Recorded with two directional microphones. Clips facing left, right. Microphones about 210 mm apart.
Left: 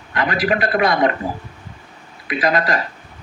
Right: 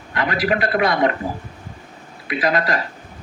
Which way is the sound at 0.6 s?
45° left (ahead or behind).